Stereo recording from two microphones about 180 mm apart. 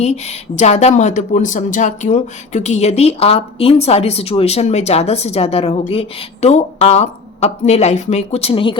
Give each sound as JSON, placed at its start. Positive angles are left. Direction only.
{"t": 0.0, "sound": "speech", "side_deg": 35}